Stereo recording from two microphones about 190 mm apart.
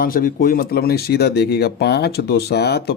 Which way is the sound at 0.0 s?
50° left (ahead or behind).